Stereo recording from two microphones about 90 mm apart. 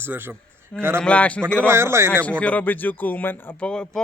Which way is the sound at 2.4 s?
15° left (ahead or behind).